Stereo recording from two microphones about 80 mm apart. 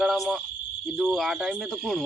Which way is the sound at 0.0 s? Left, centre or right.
Centre.